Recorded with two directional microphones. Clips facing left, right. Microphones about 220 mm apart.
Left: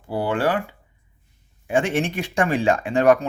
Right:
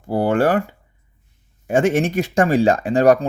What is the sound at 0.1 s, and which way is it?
Speech, 45° right (ahead or behind).